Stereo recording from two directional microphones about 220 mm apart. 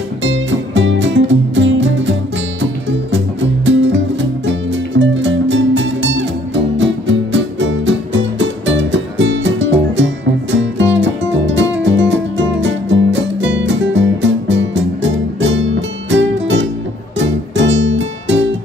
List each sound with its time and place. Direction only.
0.2 s music: 55° right (ahead or behind)